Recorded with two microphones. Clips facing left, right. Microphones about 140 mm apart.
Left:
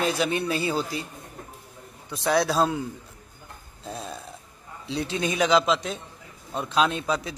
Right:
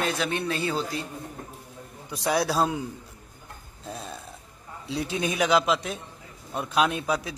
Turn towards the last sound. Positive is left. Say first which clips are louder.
# left 1 dB
turn(degrees=-10)  # may be behind; listen again after turning